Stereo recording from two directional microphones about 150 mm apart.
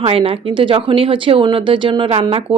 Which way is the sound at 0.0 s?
40° right (ahead or behind).